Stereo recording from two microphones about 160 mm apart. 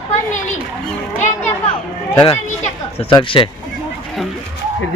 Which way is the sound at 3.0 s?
30° left (ahead or behind).